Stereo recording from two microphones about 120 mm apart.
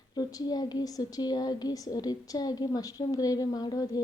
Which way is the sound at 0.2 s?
35° left (ahead or behind).